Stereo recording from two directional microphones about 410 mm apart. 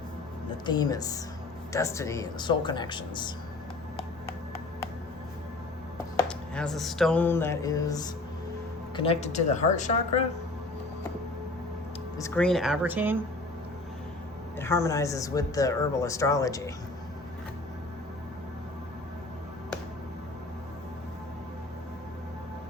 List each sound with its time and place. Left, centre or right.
0.6 s speech: centre
6.1 s a sound: centre
9.0 s speech: centre
12.1 s speech: centre
14.6 s speech: centre